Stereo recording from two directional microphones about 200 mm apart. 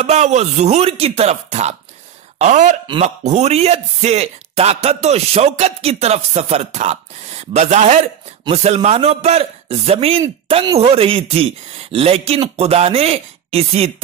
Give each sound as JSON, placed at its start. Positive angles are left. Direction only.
{"t": 0.0, "sound": "speech", "side_deg": -35}
{"t": 10.5, "sound": "speech", "side_deg": -20}
{"t": 10.8, "sound": "speech", "side_deg": -30}